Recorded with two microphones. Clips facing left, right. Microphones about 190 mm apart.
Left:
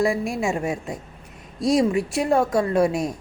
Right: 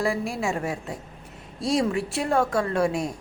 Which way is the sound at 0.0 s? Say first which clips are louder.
Left 4 dB; 15° left (ahead or behind).